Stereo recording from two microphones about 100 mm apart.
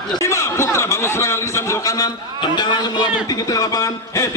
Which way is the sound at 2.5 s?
45° left (ahead or behind).